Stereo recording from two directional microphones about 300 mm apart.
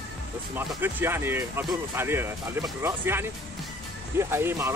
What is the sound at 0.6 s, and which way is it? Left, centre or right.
Speech, centre.